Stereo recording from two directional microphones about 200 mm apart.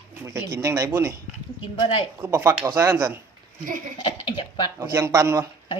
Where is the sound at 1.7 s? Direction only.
25° left (ahead or behind).